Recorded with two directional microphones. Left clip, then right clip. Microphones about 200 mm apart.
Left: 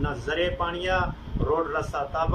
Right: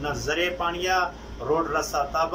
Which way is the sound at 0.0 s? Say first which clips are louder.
Right 1 dB; centre (ahead or behind).